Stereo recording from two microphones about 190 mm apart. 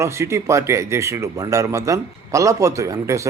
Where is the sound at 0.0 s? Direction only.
15° right (ahead or behind).